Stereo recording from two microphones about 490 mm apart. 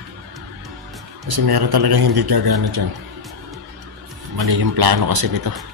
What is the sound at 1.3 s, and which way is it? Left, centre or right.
A man's voice, right.